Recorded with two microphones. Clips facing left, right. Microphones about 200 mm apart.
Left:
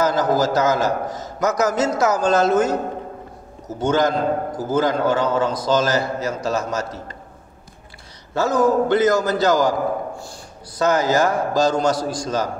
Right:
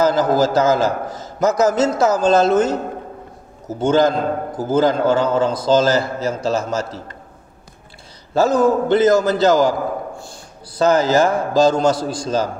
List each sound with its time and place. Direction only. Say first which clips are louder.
0.0 s a man's voice: right 3 dB; 30° right (ahead or behind)
8.4 s a man's voice: right 2 dB; 30° right (ahead or behind)
10.8 s a man's voice: right 3 dB; 30° right (ahead or behind)